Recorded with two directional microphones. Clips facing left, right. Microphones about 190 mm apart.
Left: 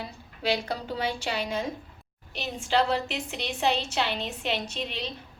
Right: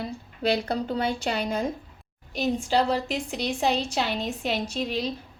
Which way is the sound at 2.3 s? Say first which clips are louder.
Right 3 dB; 40° right (ahead or behind).